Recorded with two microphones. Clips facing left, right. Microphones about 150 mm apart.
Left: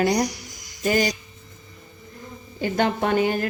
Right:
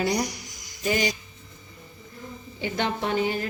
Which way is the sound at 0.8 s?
45° left (ahead or behind).